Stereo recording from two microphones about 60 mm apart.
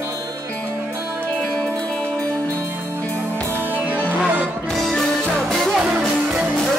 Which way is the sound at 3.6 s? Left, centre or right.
Right.